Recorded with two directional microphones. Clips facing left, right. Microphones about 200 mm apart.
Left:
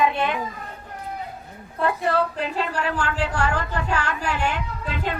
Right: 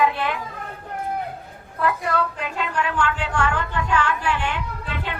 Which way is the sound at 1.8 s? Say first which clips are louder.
Left 1 dB; 30° left (ahead or behind).